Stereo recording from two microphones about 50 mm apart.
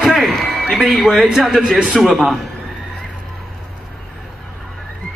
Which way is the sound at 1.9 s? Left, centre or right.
Centre.